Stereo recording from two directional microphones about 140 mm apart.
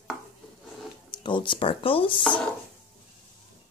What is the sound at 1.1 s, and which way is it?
Speech, 35° left (ahead or behind).